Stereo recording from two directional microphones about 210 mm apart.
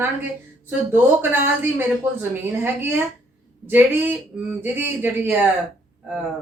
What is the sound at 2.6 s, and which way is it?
Speech, 10° right (ahead or behind).